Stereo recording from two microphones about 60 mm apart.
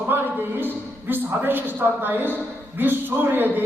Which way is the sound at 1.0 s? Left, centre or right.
Right.